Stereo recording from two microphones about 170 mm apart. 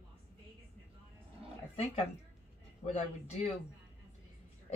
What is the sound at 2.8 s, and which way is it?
Speech, 40° left (ahead or behind).